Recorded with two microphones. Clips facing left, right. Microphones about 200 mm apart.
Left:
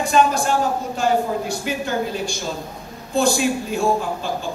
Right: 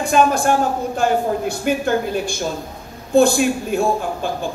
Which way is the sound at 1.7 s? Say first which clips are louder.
Right 8 dB; 55° right (ahead or behind).